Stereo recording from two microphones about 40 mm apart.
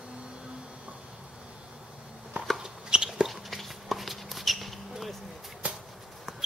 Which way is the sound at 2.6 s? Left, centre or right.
Right.